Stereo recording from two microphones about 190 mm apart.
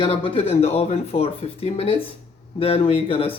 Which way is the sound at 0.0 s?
30° left (ahead or behind).